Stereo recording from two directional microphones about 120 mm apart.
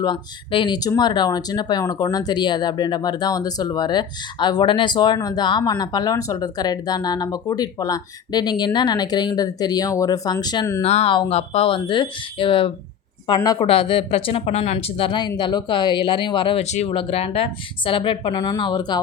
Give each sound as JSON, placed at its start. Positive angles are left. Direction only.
{"t": 0.0, "sound": "speech", "side_deg": 40}
{"t": 10.8, "sound": "speech", "side_deg": 65}
{"t": 13.2, "sound": "speech", "side_deg": 35}
{"t": 13.6, "sound": "speech", "side_deg": 50}
{"t": 16.6, "sound": "speech", "side_deg": 70}
{"t": 16.9, "sound": "speech", "side_deg": 50}